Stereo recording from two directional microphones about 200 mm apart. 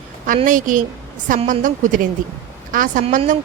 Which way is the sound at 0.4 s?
40° right (ahead or behind).